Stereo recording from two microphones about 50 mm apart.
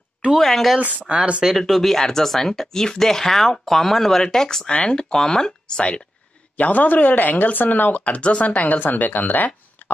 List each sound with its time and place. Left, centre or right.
0.3 s speech: centre
0.7 s speech: right
1.6 s speech: centre
6.5 s speech: left